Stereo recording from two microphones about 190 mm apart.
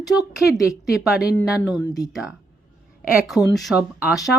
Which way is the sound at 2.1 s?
Centre (ahead or behind).